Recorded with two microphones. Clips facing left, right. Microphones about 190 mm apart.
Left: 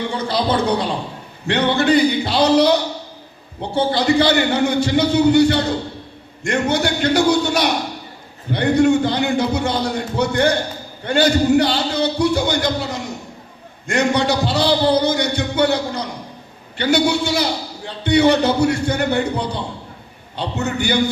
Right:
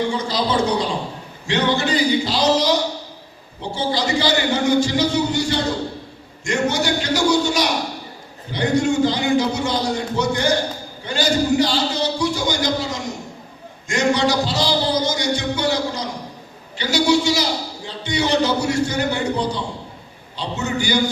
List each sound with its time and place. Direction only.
0.3 s a man's voice: 60° left (ahead or behind)
6.4 s a sound: 60° left (ahead or behind)
8.5 s a man's voice: 60° left (ahead or behind)